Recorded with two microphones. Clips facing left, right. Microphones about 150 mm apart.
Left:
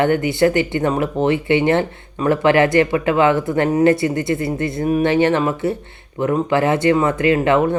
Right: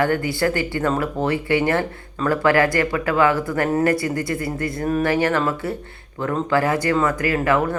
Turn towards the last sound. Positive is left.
turn(degrees=20)  # may be behind; listen again after turning